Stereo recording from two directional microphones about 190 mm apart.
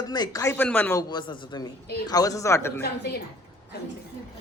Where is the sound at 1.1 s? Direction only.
20° left (ahead or behind).